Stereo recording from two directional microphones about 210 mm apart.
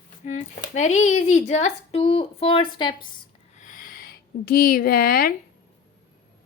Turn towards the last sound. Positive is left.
turn(degrees=45)  # may be behind; listen again after turning